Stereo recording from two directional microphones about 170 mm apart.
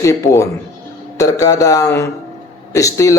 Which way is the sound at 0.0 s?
20° left (ahead or behind).